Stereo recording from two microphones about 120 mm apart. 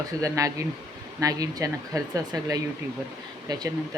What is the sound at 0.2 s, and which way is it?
Speech, 25° right (ahead or behind).